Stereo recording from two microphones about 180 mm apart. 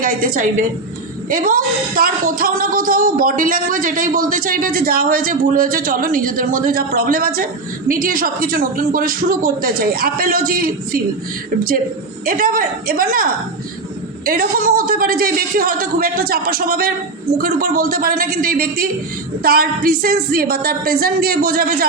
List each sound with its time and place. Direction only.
0.0 s speech: 50° right (ahead or behind)
12.2 s speech: 55° right (ahead or behind)
14.3 s speech: 55° right (ahead or behind)